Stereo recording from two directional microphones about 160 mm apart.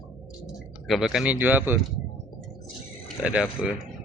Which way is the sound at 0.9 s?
Centre (ahead or behind).